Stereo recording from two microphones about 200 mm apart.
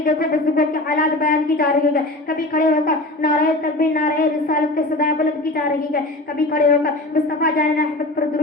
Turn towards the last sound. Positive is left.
turn(degrees=45)  # may be behind; listen again after turning